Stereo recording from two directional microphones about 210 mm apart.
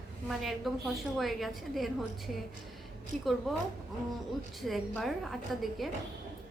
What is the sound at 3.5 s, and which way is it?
A woman's voice, centre (ahead or behind).